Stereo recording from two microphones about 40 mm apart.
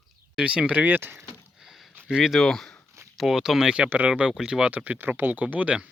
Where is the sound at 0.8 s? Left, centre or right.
Right.